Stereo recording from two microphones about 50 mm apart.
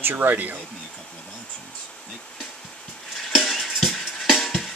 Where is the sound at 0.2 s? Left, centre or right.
Right.